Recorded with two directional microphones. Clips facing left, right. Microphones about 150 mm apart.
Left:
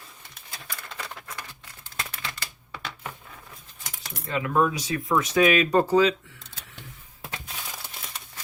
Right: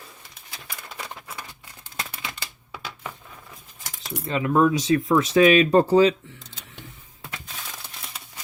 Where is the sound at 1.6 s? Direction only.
20° right (ahead or behind).